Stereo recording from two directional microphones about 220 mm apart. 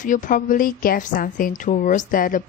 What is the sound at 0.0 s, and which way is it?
A woman's voice, 35° left (ahead or behind).